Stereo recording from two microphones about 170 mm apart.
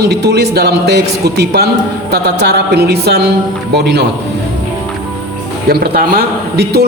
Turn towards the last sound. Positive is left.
turn(degrees=-70)  # may be behind; listen again after turning